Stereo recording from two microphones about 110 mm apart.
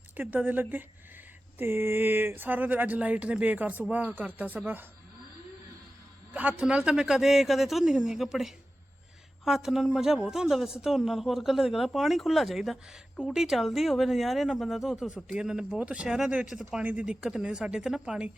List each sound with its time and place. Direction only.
0.2 s speech: 15° right (ahead or behind)
6.3 s speech: 15° right (ahead or behind)